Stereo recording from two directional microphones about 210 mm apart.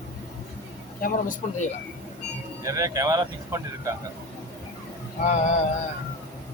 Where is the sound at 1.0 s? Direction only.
40° left (ahead or behind).